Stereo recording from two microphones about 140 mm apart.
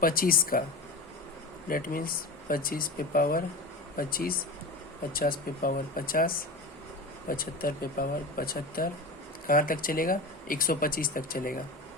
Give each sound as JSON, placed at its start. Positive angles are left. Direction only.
{"t": 0.0, "sound": "speech", "side_deg": 90}
{"t": 1.7, "sound": "speech", "side_deg": 90}